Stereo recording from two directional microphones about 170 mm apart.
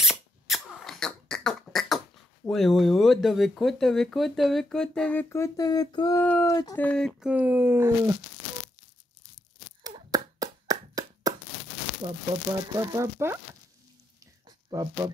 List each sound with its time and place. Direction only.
0.0 s beatboxing: centre (ahead or behind)
2.4 s speech: centre (ahead or behind); by 6.1 s 25° left (ahead or behind)
6.1 s speech: 10° left (ahead or behind)
6.8 s speech: 5° left (ahead or behind); by 8.2 s 15° right (ahead or behind)
9.8 s clapping: 20° right (ahead or behind)
12.7 s speech: 20° right (ahead or behind)
14.2 s a sound: 20° right (ahead or behind)